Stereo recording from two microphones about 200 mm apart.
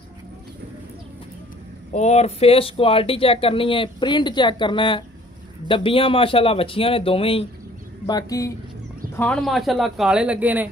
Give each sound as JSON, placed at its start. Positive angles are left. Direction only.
{"t": 1.9, "sound": "speech", "side_deg": 35}
{"t": 9.1, "sound": "speech", "side_deg": 5}